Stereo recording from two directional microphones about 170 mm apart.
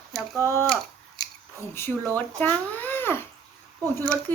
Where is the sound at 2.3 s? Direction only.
10° left (ahead or behind).